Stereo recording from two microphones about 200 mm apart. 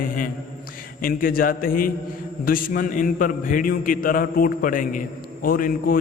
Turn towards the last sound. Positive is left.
turn(degrees=45)  # may be behind; listen again after turning